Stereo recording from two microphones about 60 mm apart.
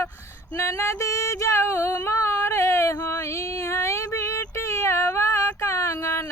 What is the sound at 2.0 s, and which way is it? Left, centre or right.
Female singing, left.